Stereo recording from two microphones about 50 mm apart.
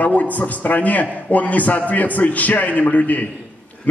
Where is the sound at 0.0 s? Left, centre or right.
Left.